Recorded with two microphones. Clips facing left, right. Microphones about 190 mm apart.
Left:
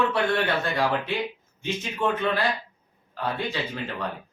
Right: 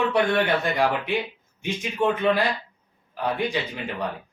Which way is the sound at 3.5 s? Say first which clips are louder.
Right 3 dB; 15° right (ahead or behind).